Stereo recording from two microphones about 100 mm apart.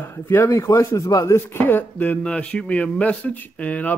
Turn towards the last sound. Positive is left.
turn(degrees=15)  # may be behind; listen again after turning